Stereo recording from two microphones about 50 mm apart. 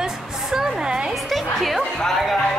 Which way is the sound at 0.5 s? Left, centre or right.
Centre.